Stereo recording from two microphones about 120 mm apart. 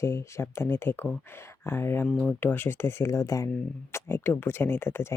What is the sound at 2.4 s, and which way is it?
Speech, 15° left (ahead or behind).